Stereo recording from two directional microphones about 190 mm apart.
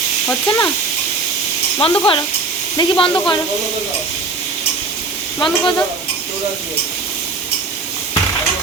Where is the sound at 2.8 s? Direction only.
25° left (ahead or behind).